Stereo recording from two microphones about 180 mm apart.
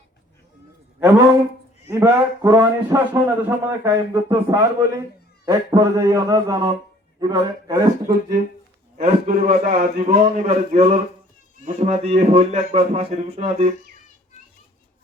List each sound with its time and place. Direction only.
0.9 s a man's voice: 10° right (ahead or behind)
9.0 s a man's voice: 45° right (ahead or behind)